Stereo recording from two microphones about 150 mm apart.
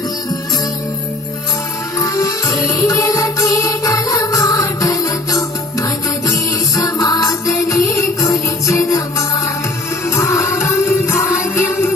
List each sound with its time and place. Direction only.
2.0 s music: 20° left (ahead or behind)
10.0 s music: 15° left (ahead or behind)